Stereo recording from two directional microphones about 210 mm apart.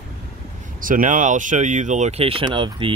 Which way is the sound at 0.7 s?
40° right (ahead or behind).